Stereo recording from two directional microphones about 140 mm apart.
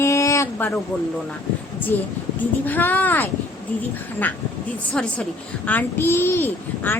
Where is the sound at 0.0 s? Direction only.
20° left (ahead or behind).